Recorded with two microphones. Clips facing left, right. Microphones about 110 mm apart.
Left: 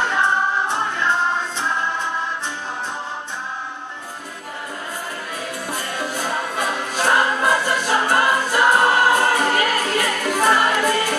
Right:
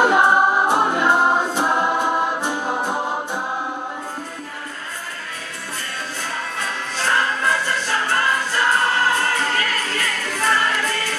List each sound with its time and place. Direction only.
0.0 s music: 15° right (ahead or behind)
1.7 s music: 45° right (ahead or behind)
5.9 s music: 15° left (ahead or behind)